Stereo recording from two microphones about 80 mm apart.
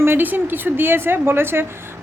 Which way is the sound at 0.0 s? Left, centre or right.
Right.